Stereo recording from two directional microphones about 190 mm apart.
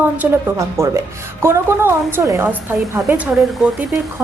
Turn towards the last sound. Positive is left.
turn(degrees=0)  # may be behind; listen again after turning